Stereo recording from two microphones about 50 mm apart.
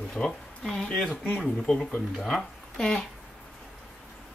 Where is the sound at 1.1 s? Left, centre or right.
Left.